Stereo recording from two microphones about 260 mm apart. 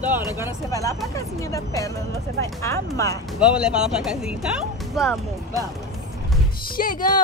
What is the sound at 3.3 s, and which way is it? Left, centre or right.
Speech, centre.